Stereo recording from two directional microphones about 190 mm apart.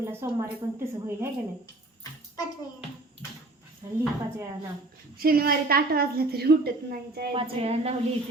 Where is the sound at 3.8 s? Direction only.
15° right (ahead or behind).